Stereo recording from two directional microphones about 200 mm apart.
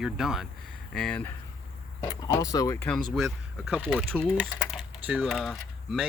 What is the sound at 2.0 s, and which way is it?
Speech, 15° left (ahead or behind).